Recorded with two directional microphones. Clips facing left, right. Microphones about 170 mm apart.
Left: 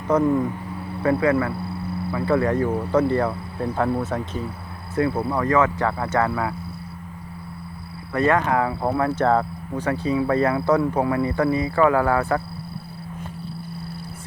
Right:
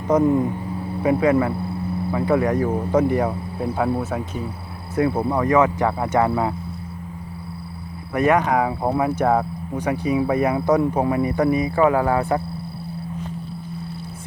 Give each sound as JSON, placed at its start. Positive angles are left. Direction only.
{"t": 0.1, "sound": "speech", "side_deg": -20}
{"t": 8.1, "sound": "speech", "side_deg": -15}